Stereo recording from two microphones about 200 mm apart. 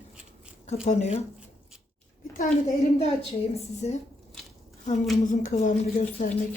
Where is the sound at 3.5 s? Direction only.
35° left (ahead or behind).